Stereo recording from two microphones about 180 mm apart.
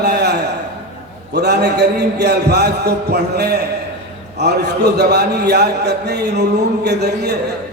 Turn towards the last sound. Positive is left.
turn(degrees=-70)  # may be behind; listen again after turning